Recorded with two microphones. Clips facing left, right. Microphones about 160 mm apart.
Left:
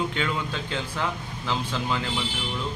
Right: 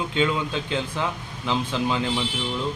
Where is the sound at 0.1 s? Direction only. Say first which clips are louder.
Right 5 dB; 20° right (ahead or behind).